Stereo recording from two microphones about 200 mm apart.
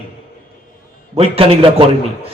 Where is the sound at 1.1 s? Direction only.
30° right (ahead or behind).